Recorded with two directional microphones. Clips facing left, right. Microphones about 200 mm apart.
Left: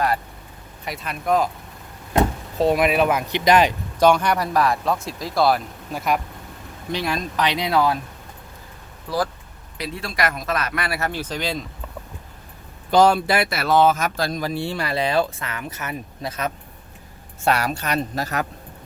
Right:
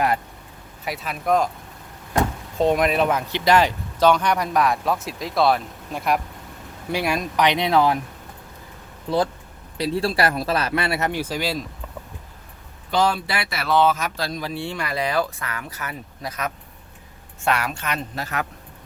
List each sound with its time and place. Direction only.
0.9 s speech: centre (ahead or behind)
2.6 s speech: 5° left (ahead or behind)
6.9 s speech: 10° right (ahead or behind)
9.0 s speech: 25° right (ahead or behind)
11.2 s speech: 10° right (ahead or behind)
12.9 s speech: 45° left (ahead or behind)